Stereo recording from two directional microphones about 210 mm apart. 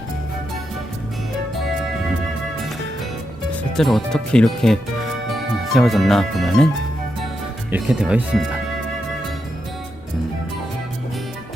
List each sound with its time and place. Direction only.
3.8 s speech: centre (ahead or behind)
7.7 s speech: 5° right (ahead or behind)